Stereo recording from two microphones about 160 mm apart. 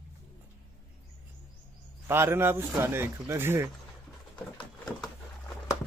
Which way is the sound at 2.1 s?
15° right (ahead or behind).